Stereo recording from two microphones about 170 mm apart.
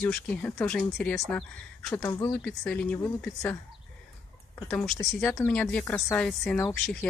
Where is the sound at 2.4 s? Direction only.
5° left (ahead or behind).